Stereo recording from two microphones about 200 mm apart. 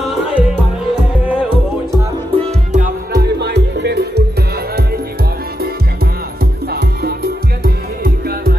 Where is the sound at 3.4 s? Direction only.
60° right (ahead or behind).